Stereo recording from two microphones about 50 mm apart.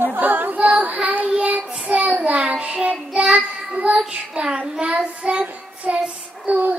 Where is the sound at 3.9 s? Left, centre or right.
Centre.